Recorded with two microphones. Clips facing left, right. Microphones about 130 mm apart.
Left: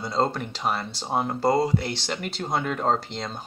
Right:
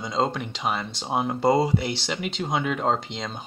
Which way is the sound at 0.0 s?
5° left (ahead or behind).